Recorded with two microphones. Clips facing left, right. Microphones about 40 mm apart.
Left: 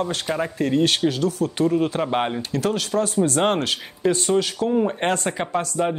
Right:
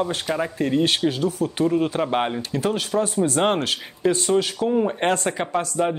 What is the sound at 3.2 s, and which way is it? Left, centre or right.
Speech, centre.